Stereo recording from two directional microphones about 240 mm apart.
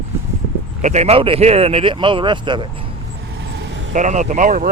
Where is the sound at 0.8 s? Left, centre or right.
Right.